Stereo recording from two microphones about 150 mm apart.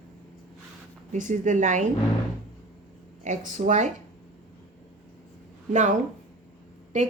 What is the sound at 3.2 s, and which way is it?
Speech, 55° right (ahead or behind).